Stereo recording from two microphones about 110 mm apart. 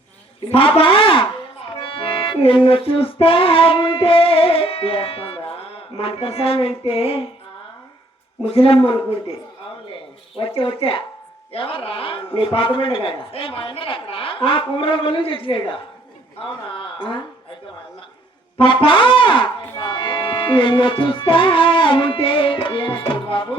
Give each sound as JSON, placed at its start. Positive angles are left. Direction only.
{"t": 0.5, "sound": "a sound", "side_deg": 55}
{"t": 1.7, "sound": "music", "side_deg": 55}
{"t": 2.6, "sound": "a sound", "side_deg": 55}
{"t": 8.4, "sound": "a man's voice", "side_deg": 60}
{"t": 10.3, "sound": "a man's voice", "side_deg": 55}
{"t": 18.5, "sound": "music", "side_deg": 55}